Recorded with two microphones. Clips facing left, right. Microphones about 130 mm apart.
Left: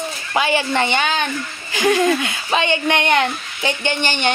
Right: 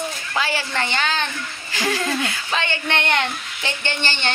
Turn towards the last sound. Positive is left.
turn(degrees=15)  # may be behind; listen again after turning